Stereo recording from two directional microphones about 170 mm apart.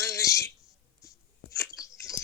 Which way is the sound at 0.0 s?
20° left (ahead or behind).